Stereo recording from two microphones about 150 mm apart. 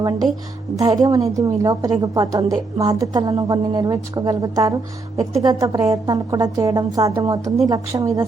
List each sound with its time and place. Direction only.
0.8 s a woman's voice: 25° right (ahead or behind)